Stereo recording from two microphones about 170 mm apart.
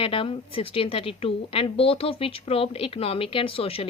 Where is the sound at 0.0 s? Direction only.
30° left (ahead or behind).